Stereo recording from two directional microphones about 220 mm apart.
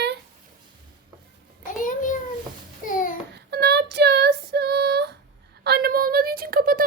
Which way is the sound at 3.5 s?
50° right (ahead or behind).